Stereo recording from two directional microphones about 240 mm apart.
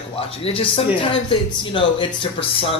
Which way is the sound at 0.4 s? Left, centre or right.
Left.